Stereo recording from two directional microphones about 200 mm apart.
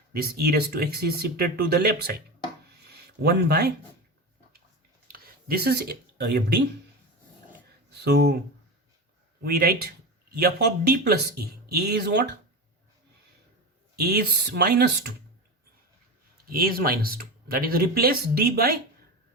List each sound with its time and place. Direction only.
0.1 s speech: 50° right (ahead or behind)
2.9 s a sound: 55° right (ahead or behind)
5.0 s speech: 45° right (ahead or behind)
8.0 s speech: 55° right (ahead or behind)
9.4 s speech: 50° right (ahead or behind)
13.9 s speech: 50° right (ahead or behind)
16.5 s speech: 50° right (ahead or behind)